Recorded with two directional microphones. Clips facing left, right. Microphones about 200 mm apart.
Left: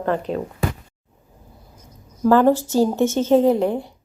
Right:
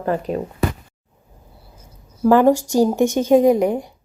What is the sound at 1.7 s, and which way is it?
A woman's voice, 10° right (ahead or behind).